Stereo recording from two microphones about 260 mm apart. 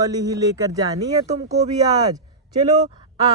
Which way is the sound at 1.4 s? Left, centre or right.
Right.